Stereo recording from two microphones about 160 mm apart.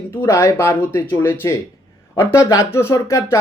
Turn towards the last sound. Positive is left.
turn(degrees=20)  # may be behind; listen again after turning